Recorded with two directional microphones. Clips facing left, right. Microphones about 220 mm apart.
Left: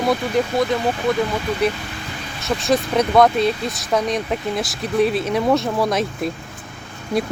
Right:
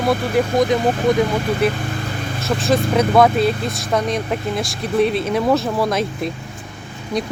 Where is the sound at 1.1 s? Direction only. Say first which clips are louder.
Right 3 dB; 15° right (ahead or behind).